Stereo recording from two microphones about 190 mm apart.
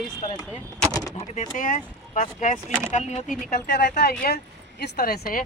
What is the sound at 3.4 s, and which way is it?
Speech, 60° left (ahead or behind).